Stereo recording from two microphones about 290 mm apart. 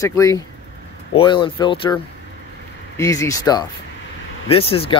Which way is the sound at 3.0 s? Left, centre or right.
Centre.